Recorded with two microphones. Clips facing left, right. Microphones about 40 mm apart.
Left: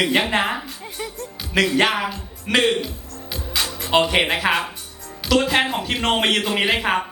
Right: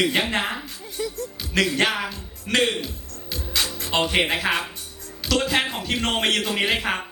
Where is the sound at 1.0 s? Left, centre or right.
Left.